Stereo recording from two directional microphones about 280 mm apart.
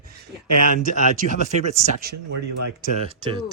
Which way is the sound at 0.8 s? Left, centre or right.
Right.